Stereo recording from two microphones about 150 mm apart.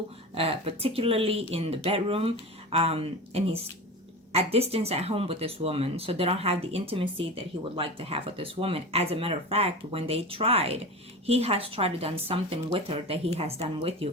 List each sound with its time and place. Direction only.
0.3 s speech: 40° right (ahead or behind)